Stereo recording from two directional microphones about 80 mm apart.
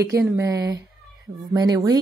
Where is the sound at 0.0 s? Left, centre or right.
Right.